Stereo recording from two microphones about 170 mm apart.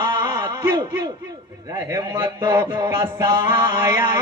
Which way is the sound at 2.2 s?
25° right (ahead or behind).